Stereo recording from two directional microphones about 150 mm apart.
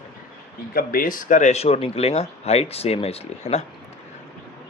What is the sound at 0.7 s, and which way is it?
Speech, 80° left.